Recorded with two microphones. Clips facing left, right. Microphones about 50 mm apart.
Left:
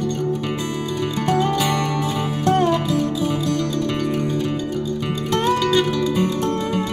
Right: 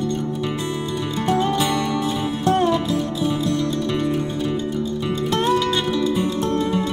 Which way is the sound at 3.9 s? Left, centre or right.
Centre.